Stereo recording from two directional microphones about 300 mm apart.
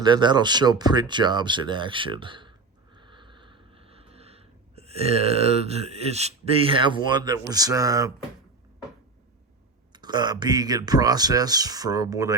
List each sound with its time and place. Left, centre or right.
0.0 s speech: centre
9.9 s speech: centre